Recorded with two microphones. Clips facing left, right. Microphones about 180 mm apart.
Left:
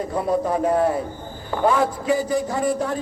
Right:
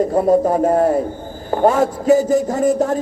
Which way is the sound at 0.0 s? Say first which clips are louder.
Right 8 dB; 45° right (ahead or behind).